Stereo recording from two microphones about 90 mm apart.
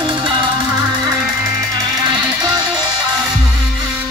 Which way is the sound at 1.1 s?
40° right (ahead or behind).